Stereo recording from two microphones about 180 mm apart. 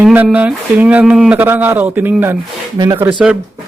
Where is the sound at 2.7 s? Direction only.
25° right (ahead or behind).